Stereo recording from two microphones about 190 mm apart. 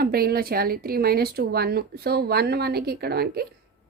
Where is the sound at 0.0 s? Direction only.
55° right (ahead or behind).